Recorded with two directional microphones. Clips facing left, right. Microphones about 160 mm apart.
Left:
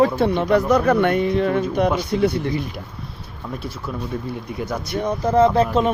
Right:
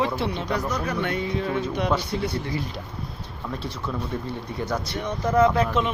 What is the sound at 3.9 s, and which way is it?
Speech, 10° left (ahead or behind).